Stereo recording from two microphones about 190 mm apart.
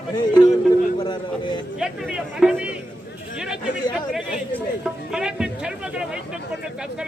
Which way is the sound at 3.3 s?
5° right (ahead or behind).